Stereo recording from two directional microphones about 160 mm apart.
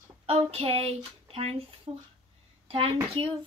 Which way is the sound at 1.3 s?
40° right (ahead or behind).